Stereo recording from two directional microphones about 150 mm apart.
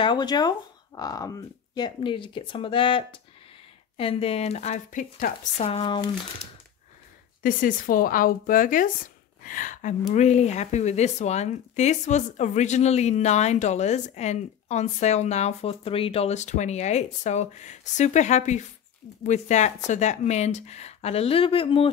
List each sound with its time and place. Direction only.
0.0 s speech: 30° left (ahead or behind); by 5.0 s 50° left (ahead or behind)
5.6 s speech: 40° left (ahead or behind)
7.4 s speech: 65° left (ahead or behind); by 21.9 s 35° left (ahead or behind)